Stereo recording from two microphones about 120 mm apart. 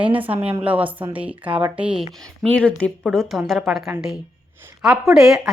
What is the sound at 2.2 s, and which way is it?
A woman's voice, 10° left (ahead or behind).